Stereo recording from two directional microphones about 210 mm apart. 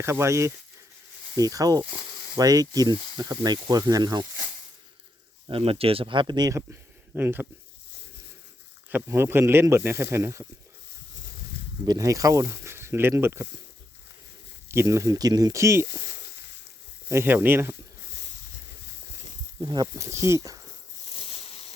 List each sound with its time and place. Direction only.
0.0 s speech: 10° right (ahead or behind)
5.5 s speech: 25° right (ahead or behind); by 7.4 s 10° right (ahead or behind)
8.9 s speech: 10° right (ahead or behind)
11.9 s speech: 15° right (ahead or behind)
14.7 s speech: 15° right (ahead or behind)
17.1 s speech: 10° right (ahead or behind)
19.6 s speech: 20° right (ahead or behind)
21.2 s a sound: 30° left (ahead or behind)